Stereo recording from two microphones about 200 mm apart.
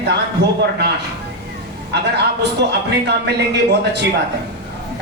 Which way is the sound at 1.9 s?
60° right (ahead or behind).